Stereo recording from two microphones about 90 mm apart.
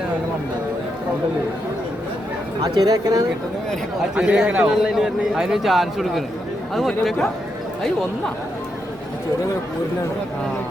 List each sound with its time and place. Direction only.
2.6 s speech: 45° right (ahead or behind)
4.1 s a man's voice: 10° right (ahead or behind)